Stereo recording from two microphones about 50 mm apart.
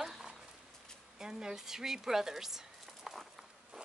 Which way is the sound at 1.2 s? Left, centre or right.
Centre.